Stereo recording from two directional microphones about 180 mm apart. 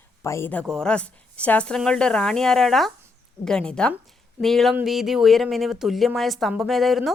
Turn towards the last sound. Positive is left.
turn(degrees=0)  # may be behind; listen again after turning